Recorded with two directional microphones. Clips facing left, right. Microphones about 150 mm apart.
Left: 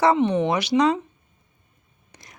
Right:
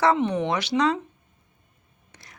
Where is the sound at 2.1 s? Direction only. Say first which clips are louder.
Left 2 dB; 15° left (ahead or behind).